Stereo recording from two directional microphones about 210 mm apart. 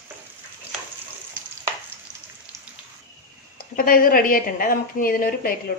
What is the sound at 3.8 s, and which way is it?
A woman's voice, 45° left (ahead or behind).